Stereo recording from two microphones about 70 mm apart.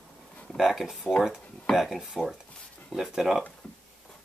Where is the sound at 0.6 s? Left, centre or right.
Centre.